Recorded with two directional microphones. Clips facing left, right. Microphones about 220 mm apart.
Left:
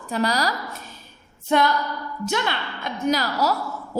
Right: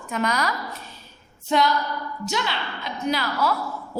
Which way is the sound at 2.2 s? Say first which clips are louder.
Left 3 dB; 55° left (ahead or behind).